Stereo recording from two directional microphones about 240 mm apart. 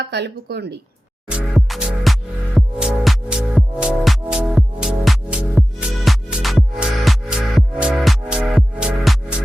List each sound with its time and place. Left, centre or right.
0.0 s speech: right
1.3 s music: centre